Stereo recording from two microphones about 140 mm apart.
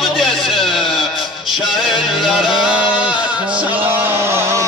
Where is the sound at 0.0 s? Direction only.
Centre (ahead or behind).